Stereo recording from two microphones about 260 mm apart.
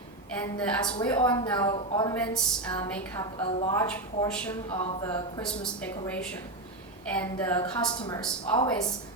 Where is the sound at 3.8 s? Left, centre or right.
Centre.